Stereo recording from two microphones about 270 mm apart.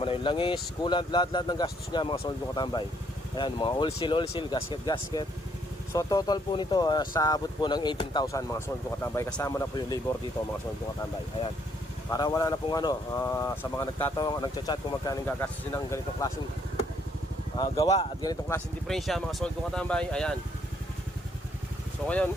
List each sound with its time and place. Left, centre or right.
0.0 s speech: centre
12.1 s speech: centre
17.6 s speech: centre
22.0 s speech: centre